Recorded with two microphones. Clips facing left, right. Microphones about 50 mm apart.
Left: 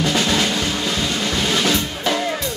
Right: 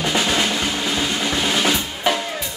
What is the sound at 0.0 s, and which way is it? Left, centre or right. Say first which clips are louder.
Drum: left 1 dB; centre.